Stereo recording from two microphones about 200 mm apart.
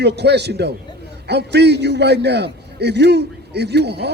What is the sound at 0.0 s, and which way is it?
Speech, 55° right (ahead or behind).